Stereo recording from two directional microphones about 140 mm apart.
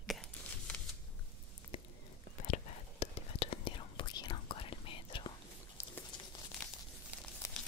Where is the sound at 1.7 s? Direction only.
35° left (ahead or behind).